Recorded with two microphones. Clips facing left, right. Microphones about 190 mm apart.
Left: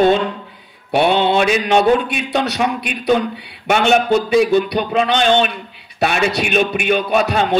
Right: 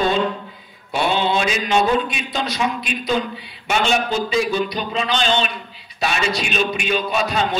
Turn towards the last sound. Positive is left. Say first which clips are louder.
# left 5 dB
turn(degrees=60)  # may be behind; listen again after turning